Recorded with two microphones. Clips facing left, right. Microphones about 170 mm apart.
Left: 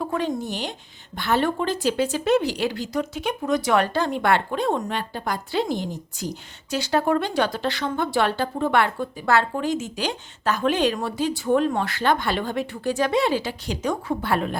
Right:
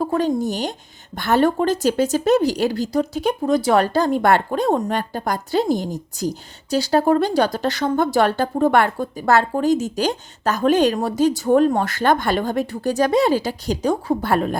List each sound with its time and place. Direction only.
0.0 s a woman's voice: 40° right (ahead or behind)